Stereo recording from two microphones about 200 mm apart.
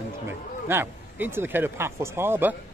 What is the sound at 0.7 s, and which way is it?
Speech, 10° right (ahead or behind).